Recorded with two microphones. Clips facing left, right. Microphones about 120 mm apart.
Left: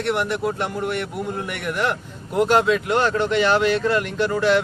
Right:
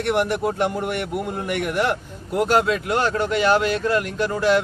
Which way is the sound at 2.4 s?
Centre (ahead or behind).